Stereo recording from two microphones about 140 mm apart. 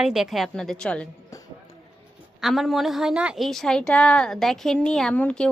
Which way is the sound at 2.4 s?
Centre (ahead or behind).